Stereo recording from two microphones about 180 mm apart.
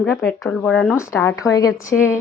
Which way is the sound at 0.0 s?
5° left (ahead or behind).